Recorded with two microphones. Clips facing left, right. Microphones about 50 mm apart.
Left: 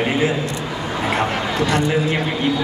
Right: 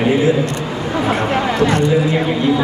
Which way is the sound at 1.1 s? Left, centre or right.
Right.